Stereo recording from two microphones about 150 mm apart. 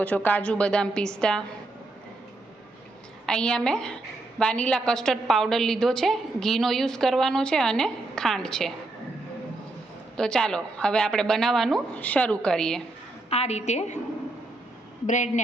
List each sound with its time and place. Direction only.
0.0 s a woman's voice: 10° left (ahead or behind)
3.2 s a woman's voice: 5° left (ahead or behind)
10.2 s a woman's voice: 5° left (ahead or behind)
13.3 s a woman's voice: 45° left (ahead or behind)
15.0 s speech: 55° left (ahead or behind)